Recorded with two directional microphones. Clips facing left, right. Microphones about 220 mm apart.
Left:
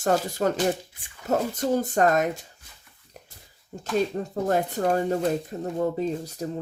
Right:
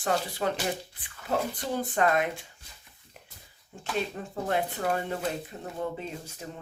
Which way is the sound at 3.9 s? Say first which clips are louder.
Left 7 dB; 40° left (ahead or behind).